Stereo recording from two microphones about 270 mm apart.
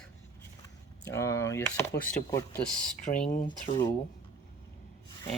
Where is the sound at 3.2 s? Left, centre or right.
Left.